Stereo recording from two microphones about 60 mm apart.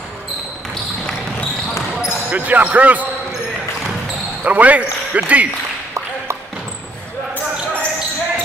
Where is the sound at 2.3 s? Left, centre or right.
Right.